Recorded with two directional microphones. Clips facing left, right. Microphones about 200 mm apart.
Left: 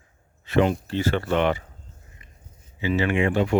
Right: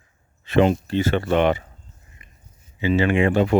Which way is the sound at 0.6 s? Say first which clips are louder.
Right 4 dB; 20° right (ahead or behind).